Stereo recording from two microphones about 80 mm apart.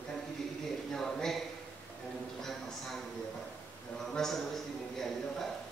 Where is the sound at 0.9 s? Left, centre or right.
Centre.